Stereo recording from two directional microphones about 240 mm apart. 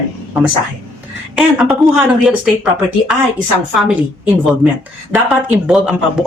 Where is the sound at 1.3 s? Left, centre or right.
Centre.